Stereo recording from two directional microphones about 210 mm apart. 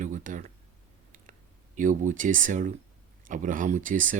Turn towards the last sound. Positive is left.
turn(degrees=-40)  # may be behind; listen again after turning